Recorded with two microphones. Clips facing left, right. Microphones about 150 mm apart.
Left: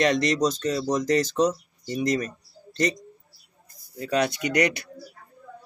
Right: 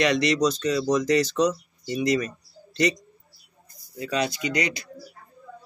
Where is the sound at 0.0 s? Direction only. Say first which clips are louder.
Even; 45° left (ahead or behind).